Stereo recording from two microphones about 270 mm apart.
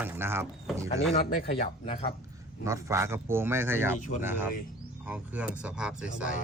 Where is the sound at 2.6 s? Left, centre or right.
Centre.